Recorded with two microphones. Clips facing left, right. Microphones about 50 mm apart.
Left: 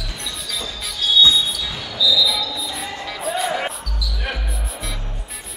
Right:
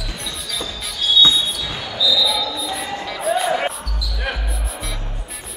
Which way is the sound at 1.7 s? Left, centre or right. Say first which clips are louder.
Even; centre.